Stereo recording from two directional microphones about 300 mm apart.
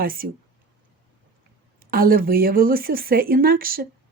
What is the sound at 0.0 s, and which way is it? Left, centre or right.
Speech, right.